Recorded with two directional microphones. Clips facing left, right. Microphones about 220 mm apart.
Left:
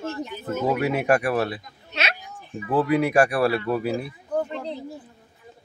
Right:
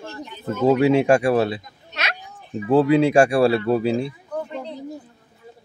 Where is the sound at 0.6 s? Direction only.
25° right (ahead or behind).